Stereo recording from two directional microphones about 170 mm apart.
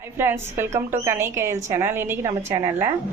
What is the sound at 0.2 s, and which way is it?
A woman's voice, 15° right (ahead or behind).